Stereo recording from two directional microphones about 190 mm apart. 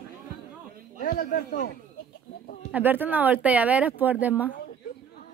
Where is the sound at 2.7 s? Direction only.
10° right (ahead or behind).